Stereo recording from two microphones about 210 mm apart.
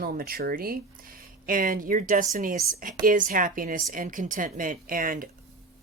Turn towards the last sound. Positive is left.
turn(degrees=-40)  # may be behind; listen again after turning